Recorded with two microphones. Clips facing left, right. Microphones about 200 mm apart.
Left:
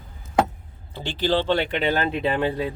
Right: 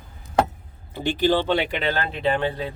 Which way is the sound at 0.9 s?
15° right (ahead or behind).